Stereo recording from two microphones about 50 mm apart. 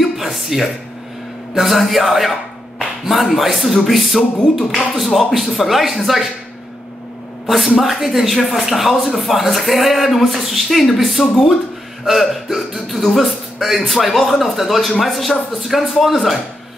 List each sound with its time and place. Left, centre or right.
0.0 s a sound: centre
1.5 s speech: centre
7.4 s speech: centre